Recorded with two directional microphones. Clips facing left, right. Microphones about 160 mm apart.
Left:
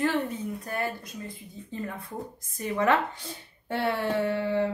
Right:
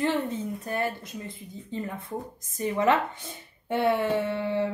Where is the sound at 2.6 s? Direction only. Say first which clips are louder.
Right 1 dB; 20° right (ahead or behind).